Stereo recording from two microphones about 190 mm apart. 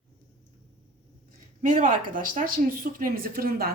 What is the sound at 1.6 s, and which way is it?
Speech, 40° right (ahead or behind).